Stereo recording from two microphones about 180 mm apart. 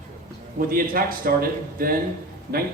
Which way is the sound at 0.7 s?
50° right (ahead or behind).